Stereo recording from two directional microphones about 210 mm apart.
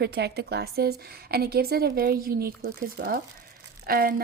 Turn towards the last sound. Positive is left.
turn(degrees=-45)  # may be behind; listen again after turning